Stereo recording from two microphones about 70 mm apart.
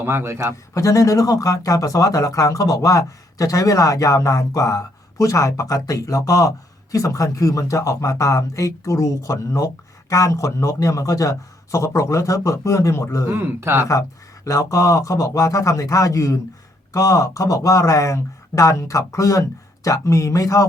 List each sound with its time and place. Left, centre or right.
0.0 s speech: right
0.7 s speech: left
13.3 s speech: right
14.4 s speech: left